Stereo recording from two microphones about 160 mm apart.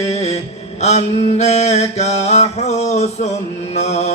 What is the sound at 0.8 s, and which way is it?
Mantra, 45° left (ahead or behind).